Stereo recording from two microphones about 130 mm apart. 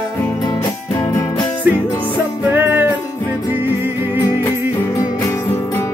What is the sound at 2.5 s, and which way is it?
Music, 15° right (ahead or behind).